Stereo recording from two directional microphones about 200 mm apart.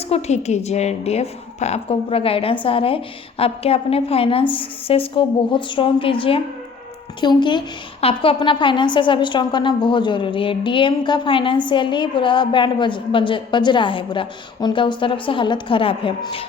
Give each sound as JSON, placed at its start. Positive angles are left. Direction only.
{"t": 0.1, "sound": "a woman's voice", "side_deg": 35}